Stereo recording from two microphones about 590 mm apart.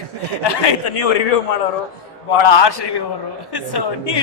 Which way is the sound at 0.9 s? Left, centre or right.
Left.